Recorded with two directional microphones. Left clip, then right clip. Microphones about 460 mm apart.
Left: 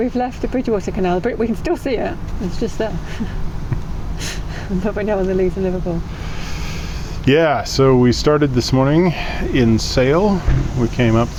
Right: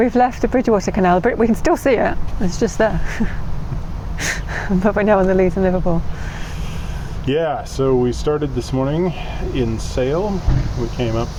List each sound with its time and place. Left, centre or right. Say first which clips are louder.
0.0 s speech: right 5 dB; centre
4.8 s speech: right 5 dB; centre
7.3 s speech: left 5 dB; left